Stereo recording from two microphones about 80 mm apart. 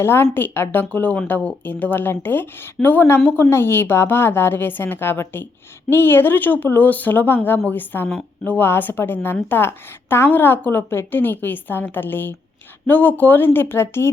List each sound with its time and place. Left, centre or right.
0.0 s a woman's voice: left